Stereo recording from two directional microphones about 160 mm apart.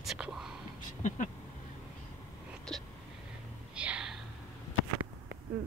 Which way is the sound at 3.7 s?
5° right (ahead or behind).